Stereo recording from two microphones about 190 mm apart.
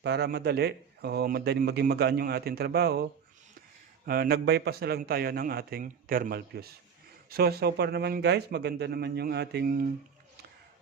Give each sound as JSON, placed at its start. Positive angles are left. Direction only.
{"t": 0.0, "sound": "a man's voice", "side_deg": -60}